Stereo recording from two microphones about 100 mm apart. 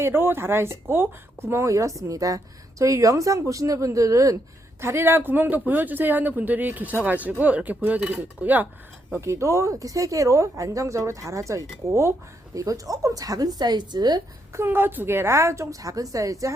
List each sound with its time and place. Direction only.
0.0 s speech: 25° right (ahead or behind)
9.1 s speech: 30° right (ahead or behind); by 14.2 s 45° right (ahead or behind)
14.5 s speech: 25° right (ahead or behind)